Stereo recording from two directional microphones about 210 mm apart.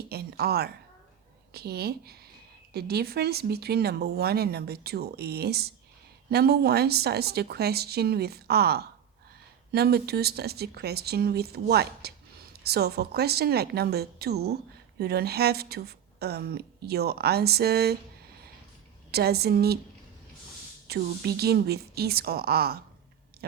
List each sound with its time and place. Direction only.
0.0 s a sound: 50° right (ahead or behind)
1.5 s a woman's voice: 50° right (ahead or behind)
19.1 s a woman's voice: 50° right (ahead or behind)
20.8 s a woman's voice: 50° right (ahead or behind)